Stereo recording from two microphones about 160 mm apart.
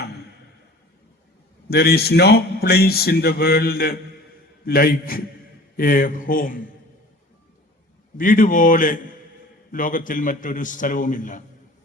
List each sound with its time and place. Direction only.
1.7 s a man's voice: 85° left; by 6.6 s 60° left (ahead or behind)
8.2 s a man's voice: 60° left (ahead or behind)